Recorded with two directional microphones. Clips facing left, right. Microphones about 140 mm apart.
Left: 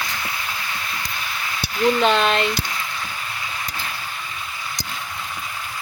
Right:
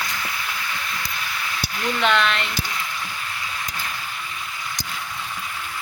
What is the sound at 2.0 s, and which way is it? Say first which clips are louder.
Speech: right 1 dB; 35° left (ahead or behind).